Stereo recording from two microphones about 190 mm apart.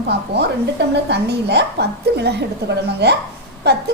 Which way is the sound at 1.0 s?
65° right (ahead or behind).